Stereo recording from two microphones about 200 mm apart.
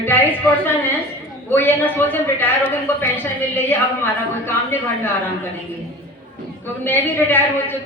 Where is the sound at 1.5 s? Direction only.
10° left (ahead or behind).